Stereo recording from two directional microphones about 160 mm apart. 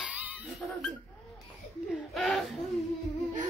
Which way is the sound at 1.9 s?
Centre (ahead or behind).